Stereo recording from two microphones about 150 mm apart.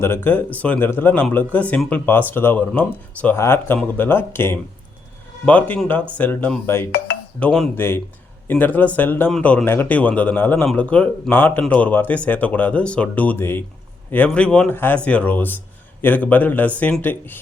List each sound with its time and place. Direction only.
0.0 s speech: 15° left (ahead or behind)